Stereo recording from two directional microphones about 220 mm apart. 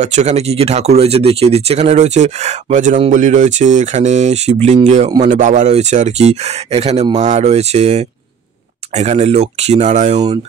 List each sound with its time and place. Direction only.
0.0 s speech: 30° right (ahead or behind)